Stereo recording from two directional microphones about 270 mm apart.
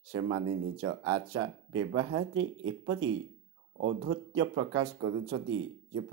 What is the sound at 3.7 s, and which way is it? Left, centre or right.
Speech, right.